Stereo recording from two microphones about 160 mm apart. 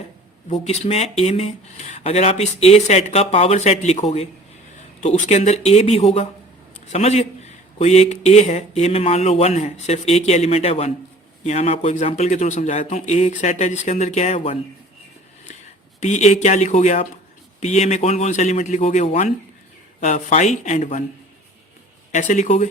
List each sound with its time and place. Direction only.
0.5 s a man's voice: 40° left (ahead or behind)
16.0 s a man's voice: 45° left (ahead or behind)
22.1 s a man's voice: 50° left (ahead or behind)